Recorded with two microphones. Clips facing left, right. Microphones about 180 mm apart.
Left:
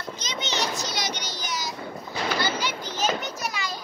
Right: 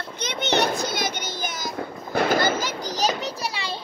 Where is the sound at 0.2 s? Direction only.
60° right (ahead or behind).